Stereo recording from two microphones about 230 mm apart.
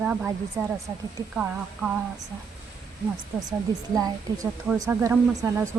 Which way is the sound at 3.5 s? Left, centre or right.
Centre.